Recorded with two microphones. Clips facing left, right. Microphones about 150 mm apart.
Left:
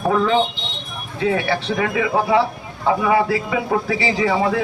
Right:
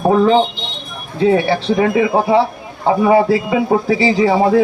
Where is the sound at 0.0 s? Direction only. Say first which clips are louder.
Right 6 dB; 30° right (ahead or behind).